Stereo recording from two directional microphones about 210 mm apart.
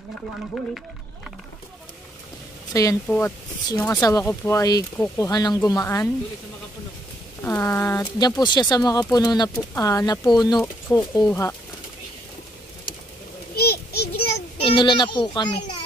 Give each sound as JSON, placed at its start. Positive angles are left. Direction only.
{"t": 2.7, "sound": "speech", "side_deg": 15}
{"t": 7.4, "sound": "speech", "side_deg": 10}
{"t": 13.6, "sound": "a sound", "side_deg": 50}
{"t": 14.6, "sound": "a child's voice", "side_deg": 25}